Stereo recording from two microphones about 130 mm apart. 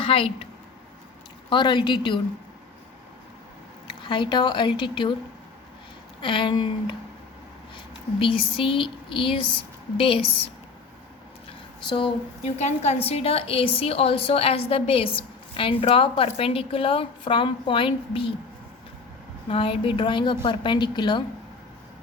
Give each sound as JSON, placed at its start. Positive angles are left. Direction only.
{"t": 0.0, "sound": "a woman's voice", "side_deg": 45}
{"t": 1.5, "sound": "a woman's voice", "side_deg": 35}
{"t": 4.0, "sound": "a woman's voice", "side_deg": 35}
{"t": 6.2, "sound": "a woman's voice", "side_deg": 40}
{"t": 8.2, "sound": "a woman's voice", "side_deg": 45}
{"t": 11.9, "sound": "a woman's voice", "side_deg": 40}
{"t": 19.5, "sound": "a woman's voice", "side_deg": 45}